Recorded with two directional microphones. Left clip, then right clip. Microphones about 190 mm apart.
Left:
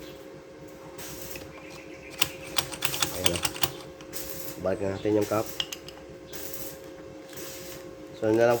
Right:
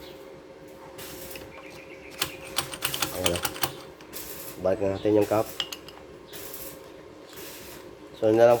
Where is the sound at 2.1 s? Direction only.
10° right (ahead or behind).